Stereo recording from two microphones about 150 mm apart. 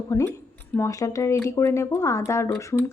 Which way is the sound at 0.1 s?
20° left (ahead or behind).